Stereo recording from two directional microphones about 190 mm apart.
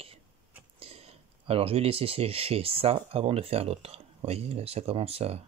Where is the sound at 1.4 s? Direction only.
30° right (ahead or behind).